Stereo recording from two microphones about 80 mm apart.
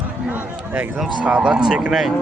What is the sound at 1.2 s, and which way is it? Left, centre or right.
Speech, centre.